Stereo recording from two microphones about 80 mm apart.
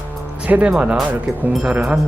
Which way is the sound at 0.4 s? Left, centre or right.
Centre.